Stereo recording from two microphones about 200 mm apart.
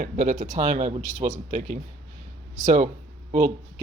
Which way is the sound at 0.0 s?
45° right (ahead or behind).